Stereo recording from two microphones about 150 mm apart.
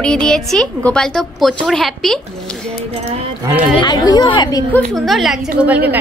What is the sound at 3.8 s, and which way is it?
Speech, 25° left (ahead or behind).